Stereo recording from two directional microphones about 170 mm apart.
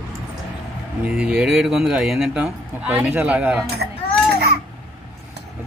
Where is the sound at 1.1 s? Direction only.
5° right (ahead or behind).